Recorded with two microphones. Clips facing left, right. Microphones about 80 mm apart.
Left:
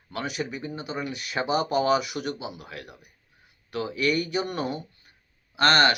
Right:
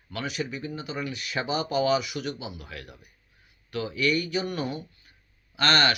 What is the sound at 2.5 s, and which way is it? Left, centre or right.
Speech, left.